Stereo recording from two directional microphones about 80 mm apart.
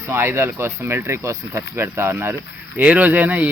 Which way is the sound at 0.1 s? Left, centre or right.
Right.